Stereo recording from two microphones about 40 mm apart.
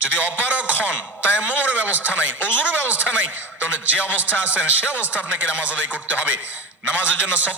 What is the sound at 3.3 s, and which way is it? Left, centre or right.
Speech, right.